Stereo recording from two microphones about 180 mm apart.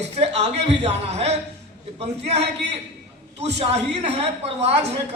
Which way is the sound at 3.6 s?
40° right (ahead or behind).